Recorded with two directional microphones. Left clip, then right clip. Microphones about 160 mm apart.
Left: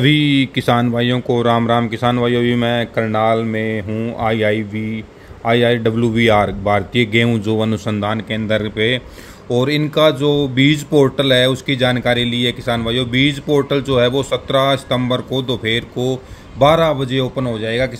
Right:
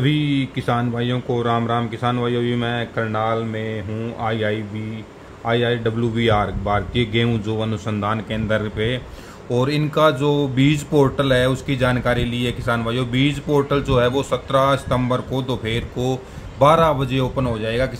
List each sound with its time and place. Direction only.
0.0 s speech: 45° left (ahead or behind); by 17.9 s 25° left (ahead or behind)